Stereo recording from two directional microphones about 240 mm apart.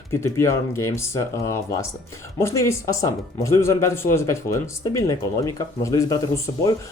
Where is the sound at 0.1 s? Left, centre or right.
Centre.